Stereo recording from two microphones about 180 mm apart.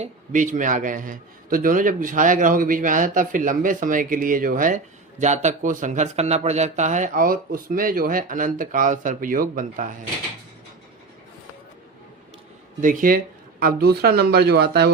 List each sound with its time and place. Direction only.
0.0 s a man's voice: 45° right (ahead or behind)
12.8 s speech: 50° right (ahead or behind)